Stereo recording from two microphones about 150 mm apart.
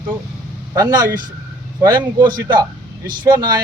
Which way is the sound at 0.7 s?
25° right (ahead or behind).